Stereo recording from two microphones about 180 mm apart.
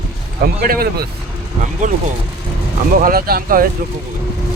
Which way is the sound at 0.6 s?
55° right (ahead or behind).